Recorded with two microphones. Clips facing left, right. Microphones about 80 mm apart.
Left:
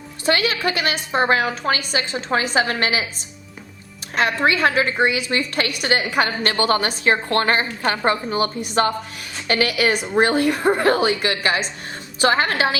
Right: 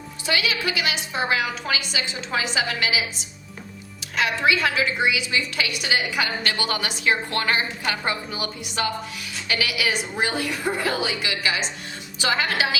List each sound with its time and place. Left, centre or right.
0.3 s a woman's voice: left